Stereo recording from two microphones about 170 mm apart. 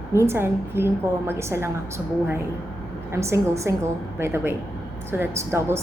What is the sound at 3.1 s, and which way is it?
A woman's voice, 15° right (ahead or behind).